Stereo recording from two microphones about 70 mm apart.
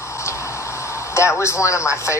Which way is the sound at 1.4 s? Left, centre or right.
Left.